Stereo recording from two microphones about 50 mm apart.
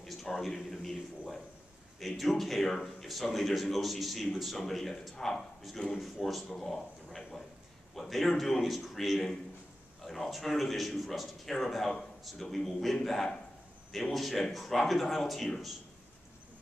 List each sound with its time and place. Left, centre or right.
0.0 s a man's voice: centre
2.0 s a man's voice: centre
5.8 s a man's voice: centre
6.2 s a man's voice: centre
7.2 s a sound: centre
7.9 s a man's voice: centre